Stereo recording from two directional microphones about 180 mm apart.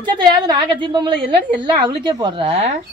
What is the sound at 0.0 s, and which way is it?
A woman's voice, 25° right (ahead or behind).